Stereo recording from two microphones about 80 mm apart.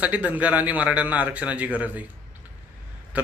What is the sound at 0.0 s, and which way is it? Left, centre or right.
A man's voice, centre.